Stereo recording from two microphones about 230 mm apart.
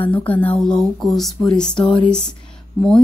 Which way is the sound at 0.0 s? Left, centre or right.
Centre.